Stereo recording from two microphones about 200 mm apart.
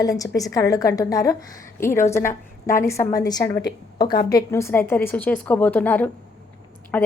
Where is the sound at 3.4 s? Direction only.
50° left (ahead or behind).